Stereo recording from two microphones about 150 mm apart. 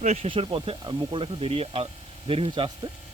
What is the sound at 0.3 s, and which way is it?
Speech, 35° right (ahead or behind).